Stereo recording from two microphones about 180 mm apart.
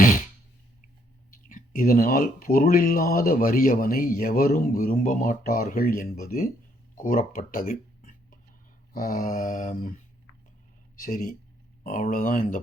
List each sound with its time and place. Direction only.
1.5 s speech: 50° left (ahead or behind)
6.9 s a sound: 50° left (ahead or behind)
8.9 s speech: 50° left (ahead or behind)
11.0 s speech: 45° left (ahead or behind)